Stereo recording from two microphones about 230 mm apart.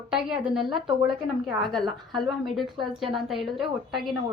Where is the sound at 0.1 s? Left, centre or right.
Centre.